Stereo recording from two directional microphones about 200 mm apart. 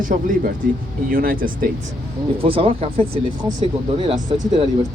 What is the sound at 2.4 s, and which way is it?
Speech, 25° right (ahead or behind).